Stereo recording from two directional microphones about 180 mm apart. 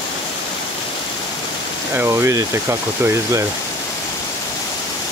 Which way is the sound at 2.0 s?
15° right (ahead or behind).